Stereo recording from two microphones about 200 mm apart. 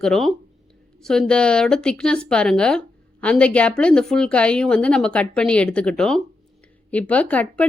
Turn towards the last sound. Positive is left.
turn(degrees=5)  # may be behind; listen again after turning